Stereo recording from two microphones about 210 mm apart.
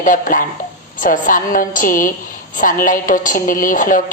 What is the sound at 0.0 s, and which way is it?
A woman's voice, 40° left (ahead or behind).